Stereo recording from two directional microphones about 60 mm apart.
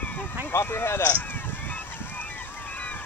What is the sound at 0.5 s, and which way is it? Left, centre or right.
Speech, left.